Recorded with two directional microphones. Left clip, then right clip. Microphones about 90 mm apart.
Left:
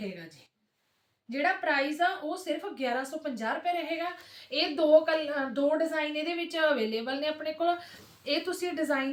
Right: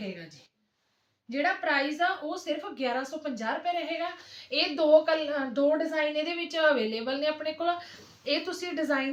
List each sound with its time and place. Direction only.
1.3 s a woman's voice: 25° right (ahead or behind)
5.5 s a woman's voice: 10° right (ahead or behind); by 9.0 s 30° right (ahead or behind)